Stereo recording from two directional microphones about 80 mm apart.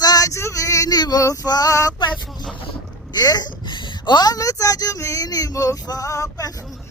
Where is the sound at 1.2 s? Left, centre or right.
Left.